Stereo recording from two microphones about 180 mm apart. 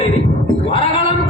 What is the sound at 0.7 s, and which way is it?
Speech, 30° left (ahead or behind).